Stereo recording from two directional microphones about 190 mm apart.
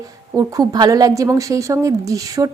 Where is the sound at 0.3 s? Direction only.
20° right (ahead or behind).